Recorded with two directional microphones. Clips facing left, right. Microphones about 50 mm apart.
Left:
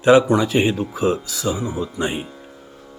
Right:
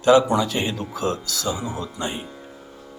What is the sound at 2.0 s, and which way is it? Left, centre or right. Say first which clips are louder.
Speech: left 6 dB; centre.